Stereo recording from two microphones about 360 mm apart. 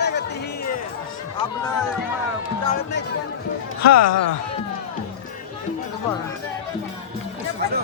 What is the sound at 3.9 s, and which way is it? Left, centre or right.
Speech, left.